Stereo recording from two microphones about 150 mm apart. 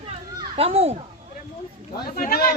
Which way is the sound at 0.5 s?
40° right (ahead or behind).